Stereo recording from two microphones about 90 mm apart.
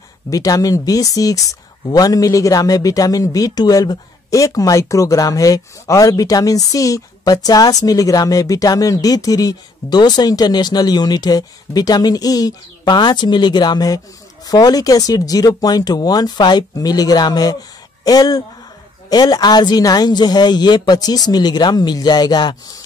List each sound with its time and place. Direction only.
0.3 s speech: 40° left (ahead or behind)